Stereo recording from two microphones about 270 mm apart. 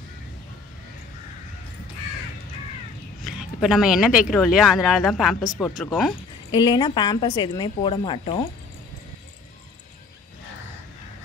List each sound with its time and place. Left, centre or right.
3.6 s speech: centre
6.5 s a woman's voice: centre